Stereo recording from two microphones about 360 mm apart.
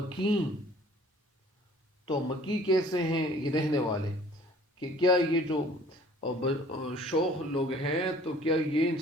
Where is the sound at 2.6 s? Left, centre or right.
Centre.